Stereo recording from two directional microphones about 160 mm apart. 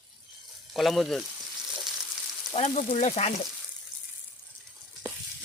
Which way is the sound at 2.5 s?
45° left (ahead or behind).